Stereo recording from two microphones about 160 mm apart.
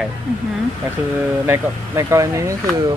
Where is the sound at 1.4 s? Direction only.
15° right (ahead or behind).